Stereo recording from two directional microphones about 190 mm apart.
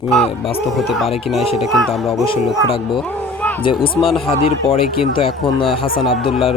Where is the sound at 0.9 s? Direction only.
Centre (ahead or behind).